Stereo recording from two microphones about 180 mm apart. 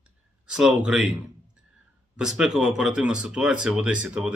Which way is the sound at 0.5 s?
5° right (ahead or behind).